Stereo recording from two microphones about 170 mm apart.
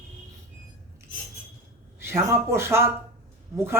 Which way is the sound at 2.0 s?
15° right (ahead or behind).